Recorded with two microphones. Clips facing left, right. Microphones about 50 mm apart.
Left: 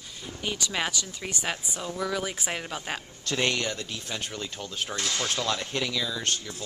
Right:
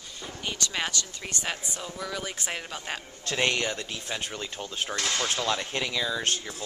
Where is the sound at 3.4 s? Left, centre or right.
Centre.